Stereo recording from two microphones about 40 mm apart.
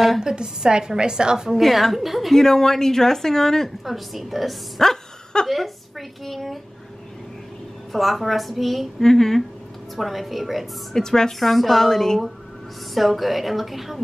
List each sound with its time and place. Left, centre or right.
0.2 s a woman's voice: centre
1.6 s a woman's voice: centre
2.3 s speech: centre
3.8 s a woman's voice: centre
4.8 s a sound: centre
5.5 s a woman's voice: centre
7.9 s a woman's voice: centre
11.0 s speech: centre
11.3 s speech: centre
12.9 s a woman's voice: centre